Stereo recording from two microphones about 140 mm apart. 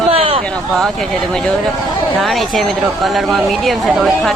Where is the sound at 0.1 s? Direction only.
40° right (ahead or behind).